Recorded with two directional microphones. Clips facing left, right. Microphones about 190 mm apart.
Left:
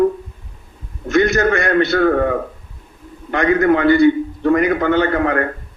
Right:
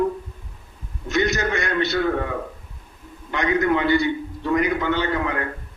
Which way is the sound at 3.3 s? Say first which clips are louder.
Left 6 dB; 55° left (ahead or behind).